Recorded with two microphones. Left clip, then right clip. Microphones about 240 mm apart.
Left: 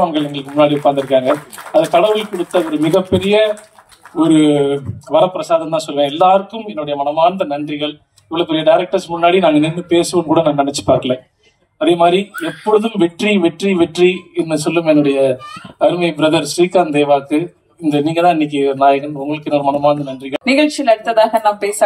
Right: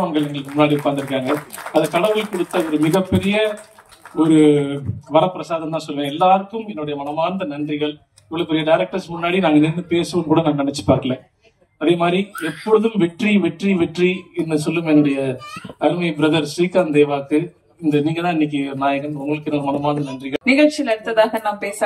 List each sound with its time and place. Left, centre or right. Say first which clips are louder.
0.0 s speech: left 5 dB; left
2.9 s speech: left 6 dB; left